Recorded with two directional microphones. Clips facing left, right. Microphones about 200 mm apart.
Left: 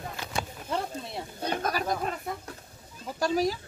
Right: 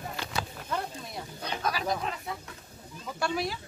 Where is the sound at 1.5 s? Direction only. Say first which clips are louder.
Left 3 dB; 50° left (ahead or behind).